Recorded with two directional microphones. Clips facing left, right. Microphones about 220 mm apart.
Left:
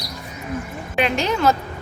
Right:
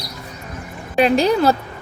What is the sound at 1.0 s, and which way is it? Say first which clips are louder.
Speech: right 6 dB; 35° right (ahead or behind).